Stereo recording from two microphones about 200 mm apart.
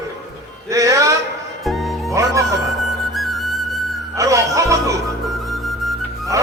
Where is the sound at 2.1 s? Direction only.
15° right (ahead or behind).